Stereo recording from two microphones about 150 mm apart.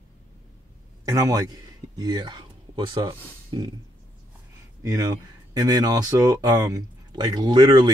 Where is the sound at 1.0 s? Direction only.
25° right (ahead or behind).